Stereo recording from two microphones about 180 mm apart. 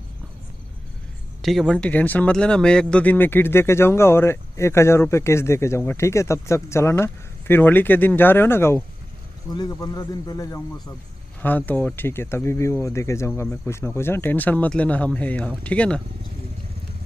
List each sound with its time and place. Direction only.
1.4 s a man's voice: centre (ahead or behind)